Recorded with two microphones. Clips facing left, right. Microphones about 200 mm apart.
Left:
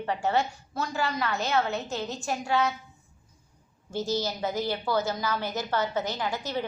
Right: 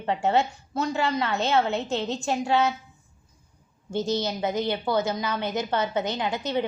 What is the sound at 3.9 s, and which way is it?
A woman's voice, 20° right (ahead or behind).